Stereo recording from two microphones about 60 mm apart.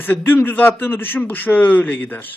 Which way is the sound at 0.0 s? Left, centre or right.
Left.